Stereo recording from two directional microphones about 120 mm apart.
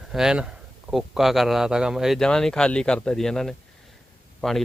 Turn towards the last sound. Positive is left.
turn(degrees=5)  # may be behind; listen again after turning